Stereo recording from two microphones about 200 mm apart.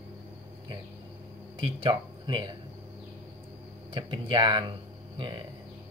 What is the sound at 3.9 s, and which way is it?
Speech, 25° right (ahead or behind).